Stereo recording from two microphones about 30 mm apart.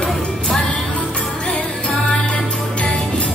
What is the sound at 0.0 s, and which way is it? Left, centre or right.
Music, centre.